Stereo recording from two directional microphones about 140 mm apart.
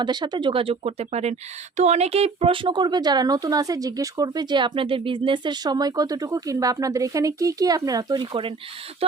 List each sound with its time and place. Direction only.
0.0 s speech: 30° right (ahead or behind)